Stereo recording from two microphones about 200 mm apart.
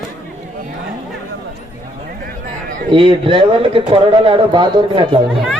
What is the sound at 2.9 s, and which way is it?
Speech, 25° right (ahead or behind).